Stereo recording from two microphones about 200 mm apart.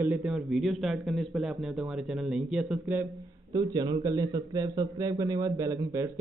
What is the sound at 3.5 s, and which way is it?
A man's voice, 20° right (ahead or behind).